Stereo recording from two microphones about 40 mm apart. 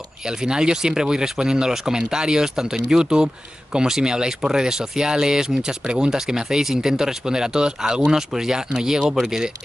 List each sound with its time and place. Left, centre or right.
0.3 s speech: centre